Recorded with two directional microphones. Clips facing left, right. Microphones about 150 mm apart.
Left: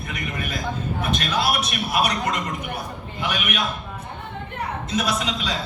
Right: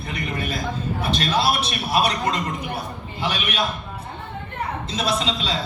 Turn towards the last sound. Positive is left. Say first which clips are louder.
# right 2 dB
turn(degrees=-30)  # may be behind; listen again after turning